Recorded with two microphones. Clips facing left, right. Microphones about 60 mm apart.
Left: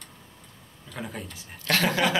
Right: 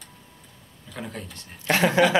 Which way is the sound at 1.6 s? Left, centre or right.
Centre.